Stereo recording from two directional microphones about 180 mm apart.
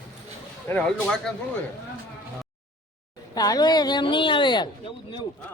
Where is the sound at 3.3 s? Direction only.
20° left (ahead or behind).